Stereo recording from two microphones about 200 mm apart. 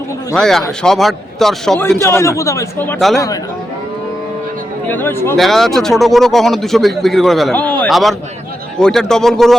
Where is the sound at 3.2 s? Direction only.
15° left (ahead or behind).